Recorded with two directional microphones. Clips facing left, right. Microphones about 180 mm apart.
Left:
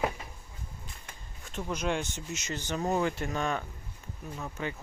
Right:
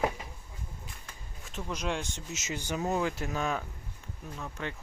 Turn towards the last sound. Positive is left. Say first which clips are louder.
# left 2 dB
turn(degrees=5)  # may be behind; listen again after turning